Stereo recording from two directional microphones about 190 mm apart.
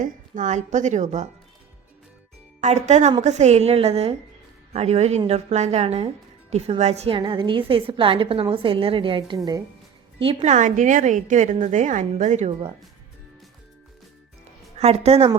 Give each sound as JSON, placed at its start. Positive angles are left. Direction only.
{"t": 0.0, "sound": "a woman's voice", "side_deg": -40}
{"t": 2.6, "sound": "a woman's voice", "side_deg": -35}
{"t": 14.8, "sound": "a woman's voice", "side_deg": -35}